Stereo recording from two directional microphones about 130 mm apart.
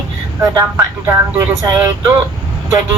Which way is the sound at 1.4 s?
25° right (ahead or behind).